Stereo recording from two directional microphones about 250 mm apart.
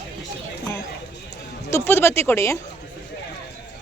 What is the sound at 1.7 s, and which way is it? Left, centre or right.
Speech, centre.